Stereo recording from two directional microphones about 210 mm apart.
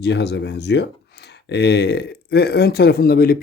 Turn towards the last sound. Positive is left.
turn(degrees=45)  # may be behind; listen again after turning